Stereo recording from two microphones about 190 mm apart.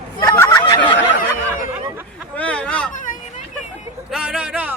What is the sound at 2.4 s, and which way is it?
Speech, 5° left (ahead or behind).